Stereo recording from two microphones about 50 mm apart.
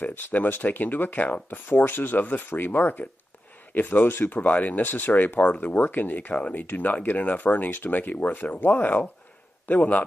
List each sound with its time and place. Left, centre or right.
0.0 s speech: left
4.4 s speech: left